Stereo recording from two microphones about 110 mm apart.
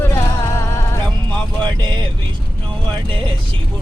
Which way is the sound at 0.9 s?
15° left (ahead or behind).